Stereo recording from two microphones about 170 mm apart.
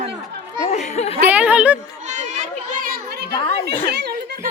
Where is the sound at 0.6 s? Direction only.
40° left (ahead or behind).